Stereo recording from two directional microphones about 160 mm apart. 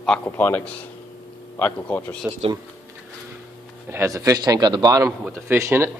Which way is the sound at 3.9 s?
20° right (ahead or behind).